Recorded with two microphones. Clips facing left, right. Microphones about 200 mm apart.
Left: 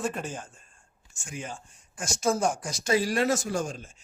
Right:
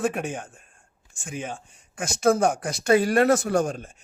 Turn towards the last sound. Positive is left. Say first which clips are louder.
# right 7 dB
turn(degrees=-60)  # may be behind; listen again after turning